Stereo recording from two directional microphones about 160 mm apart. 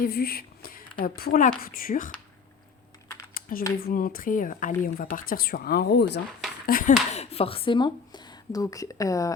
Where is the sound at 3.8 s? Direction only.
65° left (ahead or behind); by 6.2 s 90° left.